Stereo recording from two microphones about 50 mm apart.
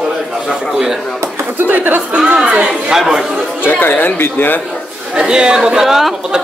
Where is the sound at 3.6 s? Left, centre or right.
Left.